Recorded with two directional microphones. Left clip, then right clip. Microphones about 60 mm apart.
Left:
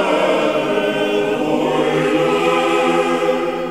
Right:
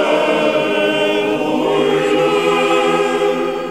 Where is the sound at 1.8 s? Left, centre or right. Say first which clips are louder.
Right 2 dB; right.